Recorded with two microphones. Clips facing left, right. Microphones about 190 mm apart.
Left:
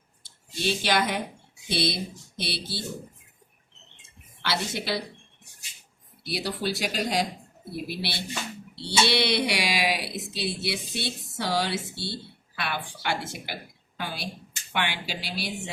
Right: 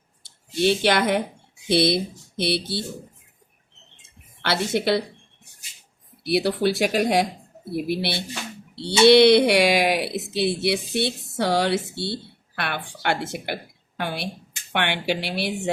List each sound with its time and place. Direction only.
0.2 s speech: 60° right (ahead or behind)
4.4 s speech: 55° right (ahead or behind)
6.2 s a woman's voice: 60° right (ahead or behind)